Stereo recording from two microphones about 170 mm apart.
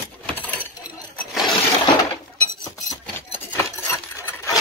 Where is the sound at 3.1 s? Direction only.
10° left (ahead or behind).